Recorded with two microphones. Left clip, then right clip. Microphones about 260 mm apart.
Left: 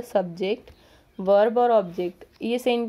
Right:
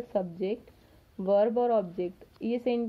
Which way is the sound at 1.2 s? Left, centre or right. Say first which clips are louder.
Left 6 dB; left.